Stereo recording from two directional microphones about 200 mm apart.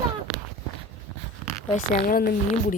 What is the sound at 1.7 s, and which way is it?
Speech, 45° left (ahead or behind).